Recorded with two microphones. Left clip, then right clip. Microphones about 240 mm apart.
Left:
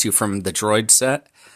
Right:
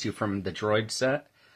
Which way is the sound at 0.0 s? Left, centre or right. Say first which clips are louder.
Left 9 dB; left.